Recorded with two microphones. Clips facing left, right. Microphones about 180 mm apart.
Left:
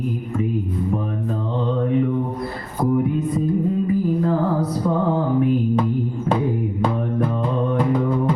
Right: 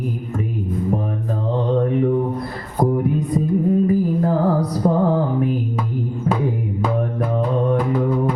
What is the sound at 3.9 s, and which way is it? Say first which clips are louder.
Music: right 1 dB; 35° right (ahead or behind).